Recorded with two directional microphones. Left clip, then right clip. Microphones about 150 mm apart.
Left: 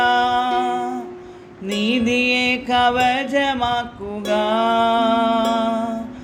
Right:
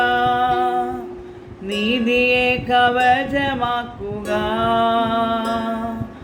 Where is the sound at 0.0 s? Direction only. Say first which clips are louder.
Even; 40° left (ahead or behind).